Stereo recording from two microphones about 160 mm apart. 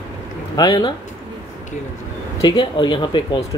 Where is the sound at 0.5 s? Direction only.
25° left (ahead or behind).